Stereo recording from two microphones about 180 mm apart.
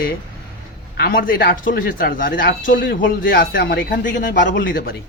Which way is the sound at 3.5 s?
80° left.